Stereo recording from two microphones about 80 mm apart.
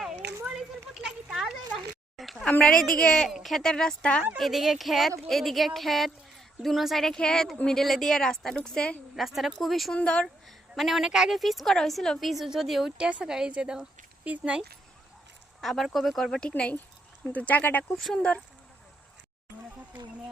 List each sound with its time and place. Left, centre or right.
1.0 s a sound: centre
2.5 s a woman's voice: centre
4.4 s a woman's voice: centre
9.2 s a woman's voice: centre
9.9 s a woman's voice: centre
10.8 s a woman's voice: centre
15.6 s a woman's voice: centre; by 17.8 s left
17.9 s a woman's voice: centre